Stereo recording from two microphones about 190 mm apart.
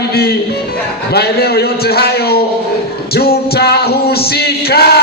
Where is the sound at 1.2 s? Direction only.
55° left (ahead or behind).